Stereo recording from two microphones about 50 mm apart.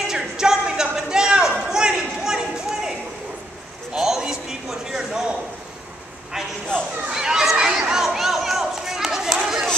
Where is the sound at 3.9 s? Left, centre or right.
Centre.